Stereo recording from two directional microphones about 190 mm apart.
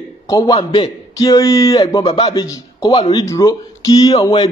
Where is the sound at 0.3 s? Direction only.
20° left (ahead or behind).